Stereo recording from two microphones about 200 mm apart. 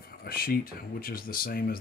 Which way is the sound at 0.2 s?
50° left (ahead or behind).